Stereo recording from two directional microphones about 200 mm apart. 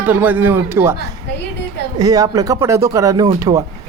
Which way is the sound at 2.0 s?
20° right (ahead or behind).